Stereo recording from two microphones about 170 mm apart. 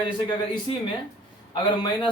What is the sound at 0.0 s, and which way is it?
Speech, 25° left (ahead or behind).